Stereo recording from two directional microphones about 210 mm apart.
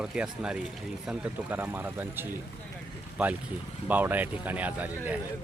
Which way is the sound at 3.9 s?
10° right (ahead or behind).